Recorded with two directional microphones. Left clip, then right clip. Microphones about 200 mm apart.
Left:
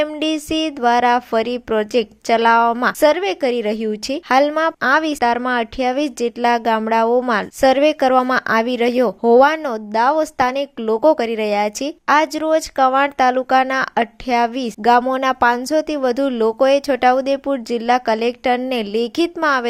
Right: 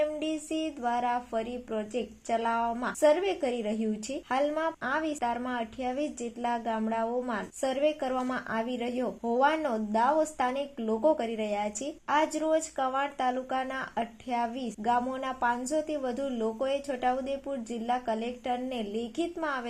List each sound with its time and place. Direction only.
0.0 s speech: 40° left (ahead or behind)